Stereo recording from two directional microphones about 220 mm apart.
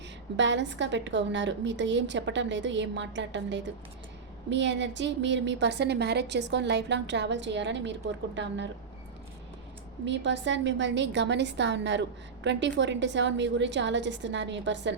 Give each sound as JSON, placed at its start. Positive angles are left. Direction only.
{"t": 0.3, "sound": "a woman's voice", "side_deg": -55}
{"t": 10.1, "sound": "a woman's voice", "side_deg": -55}